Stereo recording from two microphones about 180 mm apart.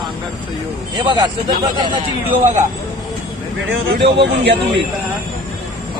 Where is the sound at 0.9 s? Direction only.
25° right (ahead or behind).